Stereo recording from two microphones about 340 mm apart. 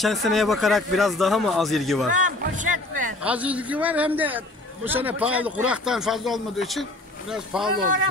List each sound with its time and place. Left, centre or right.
0.0 s speech: centre
2.1 s speech: right
3.2 s speech: centre